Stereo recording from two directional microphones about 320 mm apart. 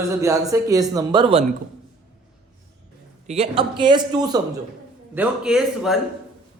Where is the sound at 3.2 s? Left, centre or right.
Centre.